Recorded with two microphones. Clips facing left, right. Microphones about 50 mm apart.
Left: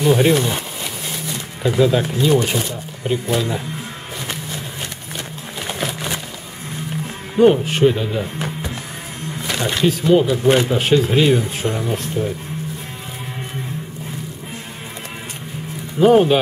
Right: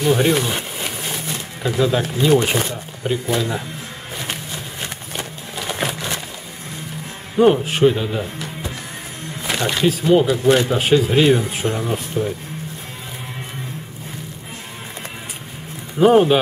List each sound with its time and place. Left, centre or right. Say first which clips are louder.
0.0 s speech: left 2 dB; centre
1.6 s speech: left 3 dB; centre
2.3 s speech: right 1 dB; right
3.1 s speech: left 1 dB; centre
7.3 s speech: left 1 dB; centre
9.6 s speech: even; centre
16.0 s speech: even; centre